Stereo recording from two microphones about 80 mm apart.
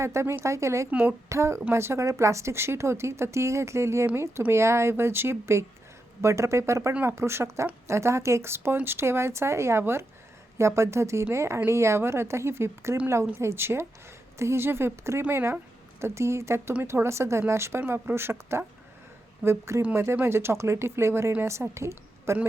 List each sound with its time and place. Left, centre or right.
0.0 s a woman's voice: right
0.9 s a woman's voice: centre
1.3 s a woman's voice: right